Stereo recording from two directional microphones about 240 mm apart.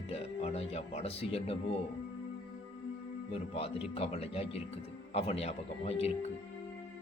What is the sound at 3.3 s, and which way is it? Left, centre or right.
Speech, left.